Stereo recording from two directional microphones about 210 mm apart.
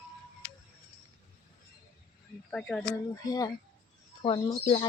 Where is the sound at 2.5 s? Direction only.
5° left (ahead or behind).